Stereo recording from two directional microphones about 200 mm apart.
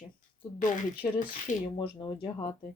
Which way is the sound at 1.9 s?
20° left (ahead or behind).